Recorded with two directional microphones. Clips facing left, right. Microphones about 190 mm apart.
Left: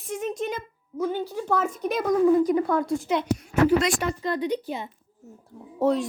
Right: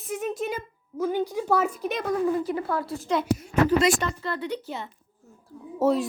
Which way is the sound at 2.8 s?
5° right (ahead or behind).